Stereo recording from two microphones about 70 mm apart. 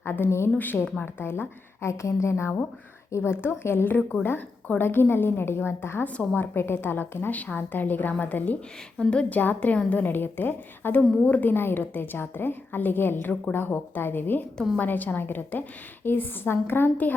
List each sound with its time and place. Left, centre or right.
0.0 s a woman's voice: left
0.5 s a woman's voice: left
9.0 s a woman's voice: centre